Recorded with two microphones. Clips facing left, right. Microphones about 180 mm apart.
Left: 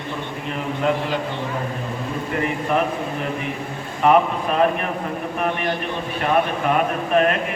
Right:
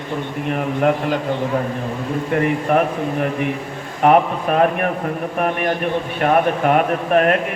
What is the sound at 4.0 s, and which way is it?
A man's voice, 55° right (ahead or behind).